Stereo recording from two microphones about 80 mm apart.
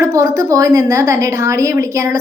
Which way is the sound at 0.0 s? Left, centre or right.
Right.